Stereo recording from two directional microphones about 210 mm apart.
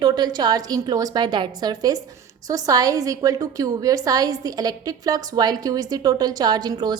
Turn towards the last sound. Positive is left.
turn(degrees=-20)  # may be behind; listen again after turning